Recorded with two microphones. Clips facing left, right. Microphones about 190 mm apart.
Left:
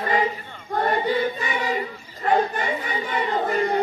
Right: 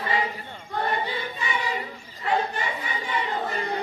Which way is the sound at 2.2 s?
55° left (ahead or behind).